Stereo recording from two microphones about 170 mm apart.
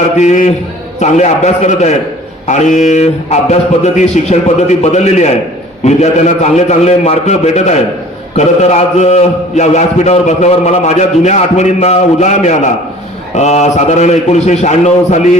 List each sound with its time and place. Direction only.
0.2 s a man's voice: 45° left (ahead or behind)